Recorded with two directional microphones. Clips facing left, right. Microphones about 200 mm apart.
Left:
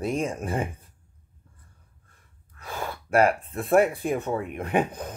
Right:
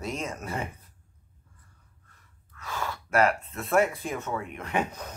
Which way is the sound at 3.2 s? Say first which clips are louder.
Left 2 dB; 55° left (ahead or behind).